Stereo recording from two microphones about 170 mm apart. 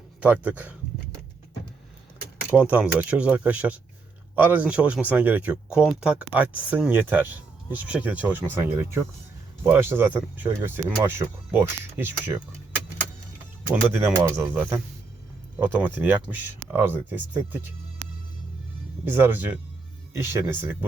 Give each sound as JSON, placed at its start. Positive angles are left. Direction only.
{"t": 0.2, "sound": "speech", "side_deg": -10}
{"t": 2.5, "sound": "speech", "side_deg": -10}
{"t": 13.9, "sound": "speech", "side_deg": -10}
{"t": 19.0, "sound": "speech", "side_deg": -10}